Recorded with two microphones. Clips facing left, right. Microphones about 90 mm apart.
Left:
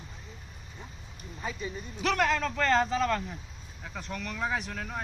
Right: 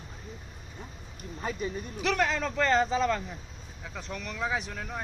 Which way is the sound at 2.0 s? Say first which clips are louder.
Left 1 dB; centre (ahead or behind).